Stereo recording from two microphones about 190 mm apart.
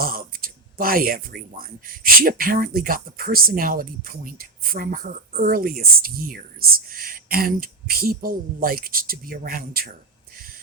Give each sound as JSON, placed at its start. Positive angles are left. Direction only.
{"t": 0.0, "sound": "speech", "side_deg": -50}